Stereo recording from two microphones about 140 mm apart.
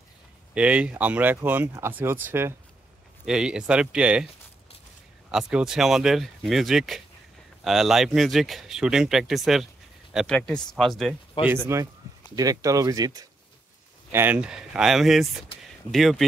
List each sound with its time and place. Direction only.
0.6 s speech: 10° right (ahead or behind)
3.3 s speech: 5° right (ahead or behind)
5.3 s speech: 5° right (ahead or behind)
11.4 s speech: 15° right (ahead or behind)
12.4 s speech: 25° right (ahead or behind)
14.1 s speech: 15° right (ahead or behind)